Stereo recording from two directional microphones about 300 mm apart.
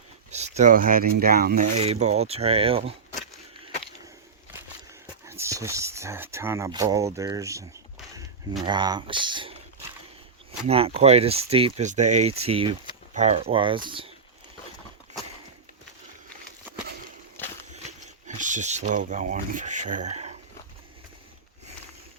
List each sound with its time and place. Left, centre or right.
0.3 s speech: right
5.3 s speech: centre
8.6 s speech: centre
10.7 s speech: centre
17.3 s a sound: centre
18.3 s speech: right